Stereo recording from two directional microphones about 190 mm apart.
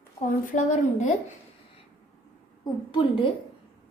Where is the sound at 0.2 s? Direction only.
40° left (ahead or behind).